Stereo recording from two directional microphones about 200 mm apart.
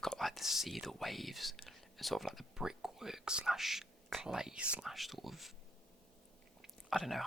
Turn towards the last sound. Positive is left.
turn(degrees=0)  # may be behind; listen again after turning